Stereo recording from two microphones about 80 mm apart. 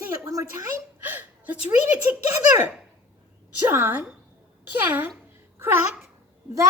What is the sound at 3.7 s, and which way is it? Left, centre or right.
A child's voice, right.